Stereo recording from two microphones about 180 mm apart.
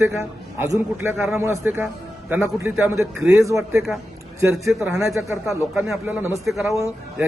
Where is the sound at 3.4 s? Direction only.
15° right (ahead or behind); by 6.8 s centre (ahead or behind).